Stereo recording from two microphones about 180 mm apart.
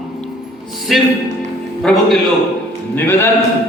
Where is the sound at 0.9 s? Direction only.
Centre (ahead or behind).